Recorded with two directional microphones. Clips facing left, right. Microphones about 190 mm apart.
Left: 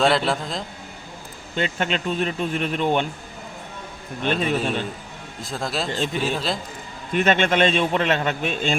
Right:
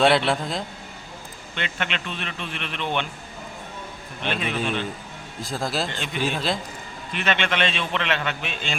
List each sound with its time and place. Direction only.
0.0 s a man's voice: centre (ahead or behind)
1.5 s speech: 35° left (ahead or behind)
4.2 s speech: 40° left (ahead or behind)
5.4 s a man's voice: centre (ahead or behind)
7.1 s a man's voice: 45° left (ahead or behind)